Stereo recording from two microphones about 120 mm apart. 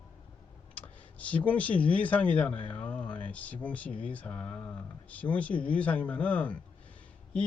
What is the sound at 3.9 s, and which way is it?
Speech, 45° left (ahead or behind).